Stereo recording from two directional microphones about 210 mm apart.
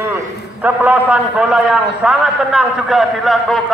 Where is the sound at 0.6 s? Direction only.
5° right (ahead or behind).